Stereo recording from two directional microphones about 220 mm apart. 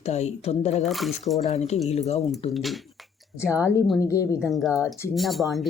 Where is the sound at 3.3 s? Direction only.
15° left (ahead or behind).